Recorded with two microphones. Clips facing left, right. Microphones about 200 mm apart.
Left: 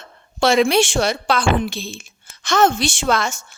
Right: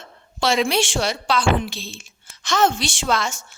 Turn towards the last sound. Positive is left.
turn(degrees=50)  # may be behind; listen again after turning